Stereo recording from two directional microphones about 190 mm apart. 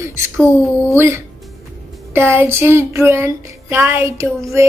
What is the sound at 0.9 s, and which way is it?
Music, 15° right (ahead or behind).